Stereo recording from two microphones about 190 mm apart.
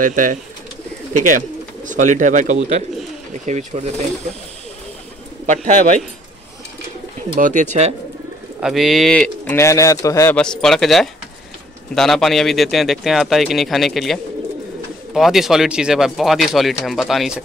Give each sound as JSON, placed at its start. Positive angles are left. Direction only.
{"t": 0.0, "sound": "speech", "side_deg": -45}
{"t": 1.9, "sound": "speech", "side_deg": -40}
{"t": 5.5, "sound": "speech", "side_deg": -40}
{"t": 7.3, "sound": "speech", "side_deg": -40}
{"t": 8.5, "sound": "speech", "side_deg": 0}